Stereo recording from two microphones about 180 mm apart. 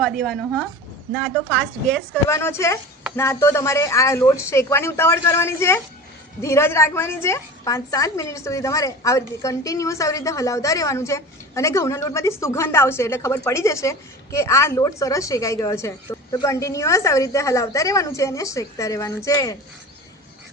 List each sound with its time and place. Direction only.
0.0 s a woman's voice: 5° left (ahead or behind)